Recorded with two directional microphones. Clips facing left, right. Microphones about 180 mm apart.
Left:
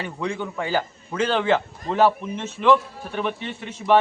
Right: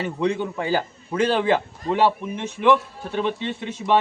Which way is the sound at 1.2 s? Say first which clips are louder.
Right 1 dB; 10° right (ahead or behind).